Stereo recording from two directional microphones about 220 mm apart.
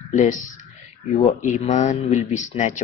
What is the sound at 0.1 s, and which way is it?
Speech, 35° left (ahead or behind).